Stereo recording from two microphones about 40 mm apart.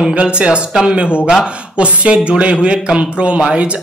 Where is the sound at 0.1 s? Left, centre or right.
Right.